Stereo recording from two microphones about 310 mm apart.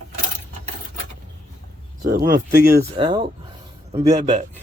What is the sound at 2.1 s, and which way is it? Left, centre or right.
Speech, right.